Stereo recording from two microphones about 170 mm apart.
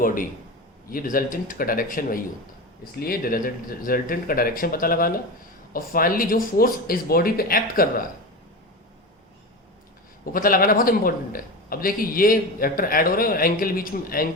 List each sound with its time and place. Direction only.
0.0 s a man's voice: 55° left (ahead or behind)
10.3 s a man's voice: 55° left (ahead or behind)